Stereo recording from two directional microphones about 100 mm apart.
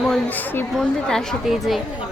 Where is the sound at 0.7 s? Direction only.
5° left (ahead or behind).